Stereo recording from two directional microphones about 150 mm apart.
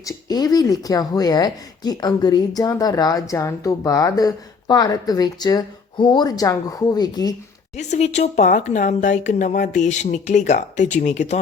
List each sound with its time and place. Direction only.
0.0 s speech: 25° left (ahead or behind)
7.8 s speech: 50° left (ahead or behind)